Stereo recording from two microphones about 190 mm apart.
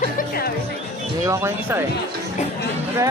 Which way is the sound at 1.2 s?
15° right (ahead or behind).